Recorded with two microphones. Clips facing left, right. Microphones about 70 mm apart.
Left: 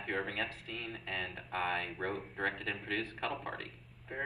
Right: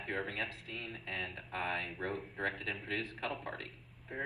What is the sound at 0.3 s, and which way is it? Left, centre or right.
Speech, left.